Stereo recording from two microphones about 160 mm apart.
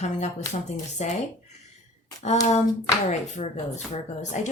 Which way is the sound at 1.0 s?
45° left (ahead or behind).